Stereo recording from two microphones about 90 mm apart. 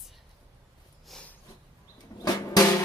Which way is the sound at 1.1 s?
Centre (ahead or behind).